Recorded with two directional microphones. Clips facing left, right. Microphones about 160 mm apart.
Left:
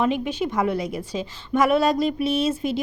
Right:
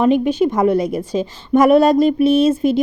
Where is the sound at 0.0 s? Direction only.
45° right (ahead or behind).